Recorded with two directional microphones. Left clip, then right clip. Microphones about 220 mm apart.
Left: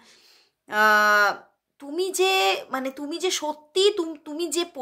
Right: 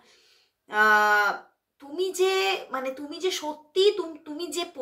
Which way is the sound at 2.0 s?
50° left (ahead or behind).